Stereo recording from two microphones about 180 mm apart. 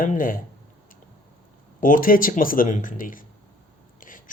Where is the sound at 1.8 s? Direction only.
50° left (ahead or behind).